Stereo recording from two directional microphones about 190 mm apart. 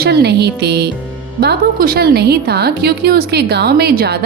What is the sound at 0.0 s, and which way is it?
A woman's voice, 60° right (ahead or behind).